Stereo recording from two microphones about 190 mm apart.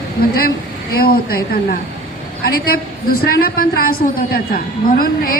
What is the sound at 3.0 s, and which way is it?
A man's voice, 50° left (ahead or behind).